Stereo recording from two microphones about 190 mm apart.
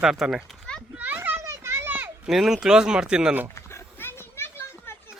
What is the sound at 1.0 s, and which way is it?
Children playing, 10° right (ahead or behind).